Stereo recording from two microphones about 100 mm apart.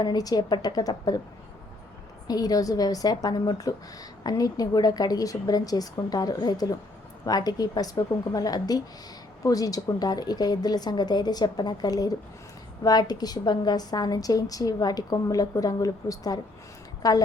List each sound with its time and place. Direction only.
0.0 s a woman's voice: 40° left (ahead or behind)
2.2 s a woman's voice: 40° left (ahead or behind)